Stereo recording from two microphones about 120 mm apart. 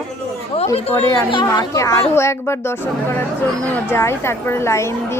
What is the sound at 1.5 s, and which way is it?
A woman's voice, 25° left (ahead or behind).